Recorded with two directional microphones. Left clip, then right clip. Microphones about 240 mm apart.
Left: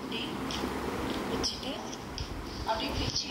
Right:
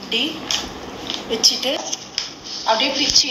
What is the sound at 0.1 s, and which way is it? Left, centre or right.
A woman's voice, right.